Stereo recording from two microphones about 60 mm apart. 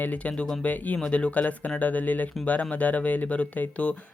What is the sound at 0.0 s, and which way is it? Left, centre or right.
Speech, left.